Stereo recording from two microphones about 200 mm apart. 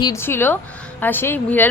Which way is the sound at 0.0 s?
15° left (ahead or behind).